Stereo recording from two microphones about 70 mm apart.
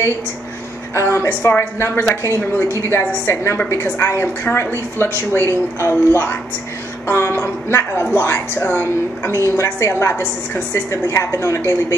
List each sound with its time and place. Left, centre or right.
0.9 s a woman's voice: left
8.5 s a woman's voice: left
9.6 s a woman's voice: left